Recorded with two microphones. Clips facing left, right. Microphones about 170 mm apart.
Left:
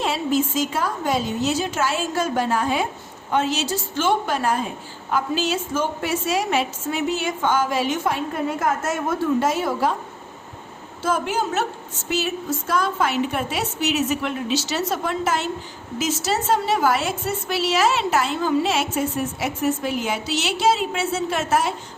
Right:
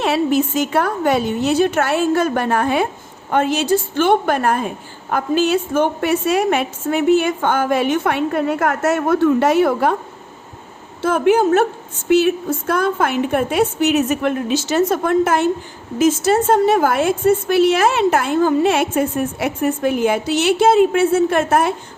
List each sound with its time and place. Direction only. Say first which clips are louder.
0.0 s a woman's voice: right 5 dB; 65° right (ahead or behind)
11.0 s a woman's voice: right 9 dB; 60° right (ahead or behind)